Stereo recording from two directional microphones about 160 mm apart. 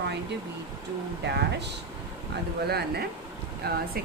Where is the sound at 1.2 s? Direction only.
90° right.